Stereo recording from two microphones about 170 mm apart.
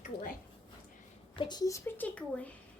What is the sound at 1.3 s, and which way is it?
A woman's voice, 30° left (ahead or behind).